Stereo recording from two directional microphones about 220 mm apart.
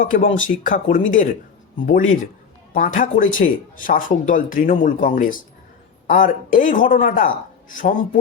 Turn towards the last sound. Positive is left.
turn(degrees=35)  # may be behind; listen again after turning